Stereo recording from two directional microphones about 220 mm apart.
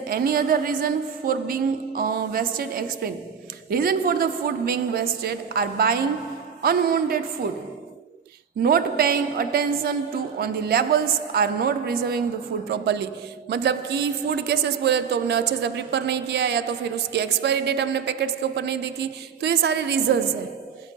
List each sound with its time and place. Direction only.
0.1 s a woman's voice: 40° right (ahead or behind)
8.6 s a woman's voice: 45° right (ahead or behind)